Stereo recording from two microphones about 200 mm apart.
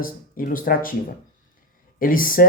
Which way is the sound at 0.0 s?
45° left (ahead or behind).